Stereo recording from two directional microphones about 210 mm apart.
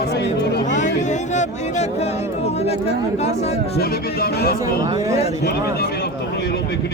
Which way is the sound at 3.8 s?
45° left (ahead or behind).